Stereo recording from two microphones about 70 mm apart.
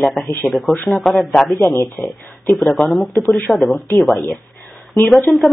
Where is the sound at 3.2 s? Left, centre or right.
Left.